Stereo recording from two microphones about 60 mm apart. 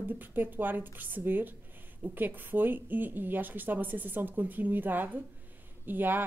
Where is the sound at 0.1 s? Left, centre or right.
Right.